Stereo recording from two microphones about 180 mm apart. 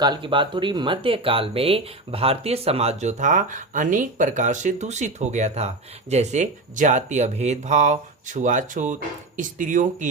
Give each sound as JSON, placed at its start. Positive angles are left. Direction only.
{"t": 0.0, "sound": "speech", "side_deg": -25}